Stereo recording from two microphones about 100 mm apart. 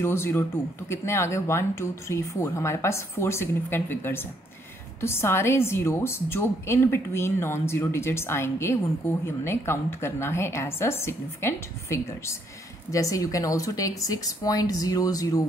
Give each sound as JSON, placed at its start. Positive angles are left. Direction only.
{"t": 0.0, "sound": "speech", "side_deg": 25}